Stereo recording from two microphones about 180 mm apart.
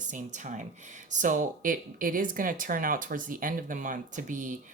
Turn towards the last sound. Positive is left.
turn(degrees=-45)  # may be behind; listen again after turning